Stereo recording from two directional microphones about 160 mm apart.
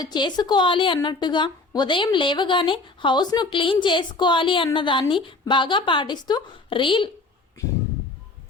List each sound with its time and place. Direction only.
0.0 s a woman's voice: 25° left (ahead or behind)